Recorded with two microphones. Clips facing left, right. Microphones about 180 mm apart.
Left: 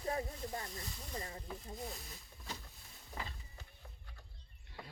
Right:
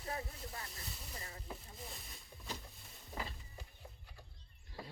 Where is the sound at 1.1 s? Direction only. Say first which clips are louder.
Left 8 dB; 30° left (ahead or behind).